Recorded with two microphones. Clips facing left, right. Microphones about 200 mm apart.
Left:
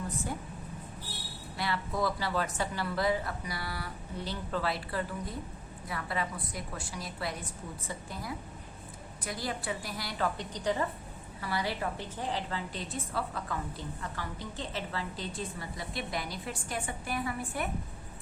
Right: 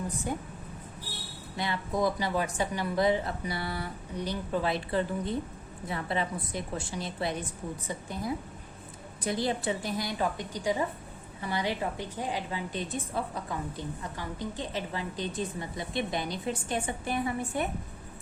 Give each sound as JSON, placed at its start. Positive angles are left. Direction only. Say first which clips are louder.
{"t": 1.5, "sound": "a woman's voice", "louder": "right 3 dB", "side_deg": -20}